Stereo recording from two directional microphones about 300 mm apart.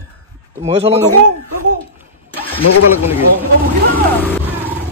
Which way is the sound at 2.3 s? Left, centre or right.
Centre.